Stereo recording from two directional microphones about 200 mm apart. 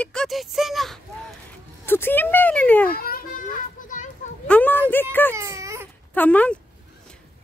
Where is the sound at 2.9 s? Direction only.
50° left (ahead or behind).